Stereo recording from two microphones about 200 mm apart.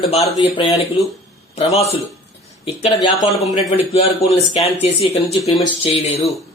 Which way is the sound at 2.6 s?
30° left (ahead or behind).